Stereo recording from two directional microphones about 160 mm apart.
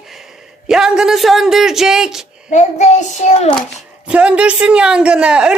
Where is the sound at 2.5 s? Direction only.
45° left (ahead or behind).